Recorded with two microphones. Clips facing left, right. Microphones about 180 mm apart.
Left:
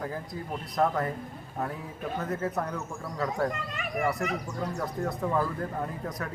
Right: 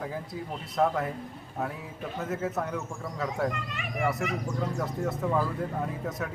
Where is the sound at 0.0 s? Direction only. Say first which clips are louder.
Even; 5° right (ahead or behind).